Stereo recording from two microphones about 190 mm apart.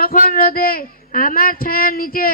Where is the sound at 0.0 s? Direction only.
50° left (ahead or behind).